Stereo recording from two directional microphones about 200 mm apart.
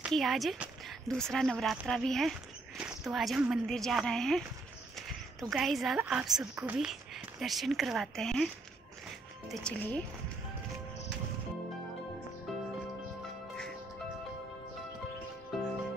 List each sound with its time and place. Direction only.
0.0 s speech: centre (ahead or behind)
9.5 s speech: 5° left (ahead or behind)